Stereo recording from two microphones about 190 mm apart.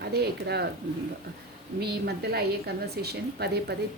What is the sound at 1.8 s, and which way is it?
A woman's voice, 60° right (ahead or behind).